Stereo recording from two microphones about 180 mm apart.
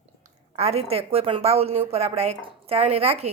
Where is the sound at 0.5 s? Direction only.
35° right (ahead or behind).